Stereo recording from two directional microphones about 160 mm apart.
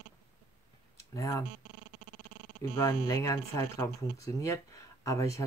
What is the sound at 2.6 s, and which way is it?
Speech, 20° left (ahead or behind).